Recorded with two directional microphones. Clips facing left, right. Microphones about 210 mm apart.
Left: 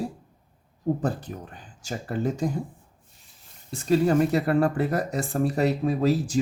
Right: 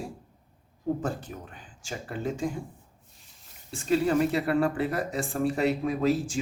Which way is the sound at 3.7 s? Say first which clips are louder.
Left 3 dB; 40° left (ahead or behind).